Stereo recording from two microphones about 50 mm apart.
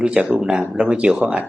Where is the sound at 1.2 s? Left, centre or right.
Right.